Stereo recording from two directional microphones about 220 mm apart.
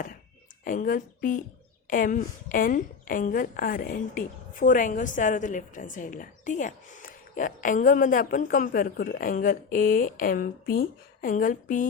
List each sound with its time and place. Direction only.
0.6 s a woman's voice: 40° left (ahead or behind)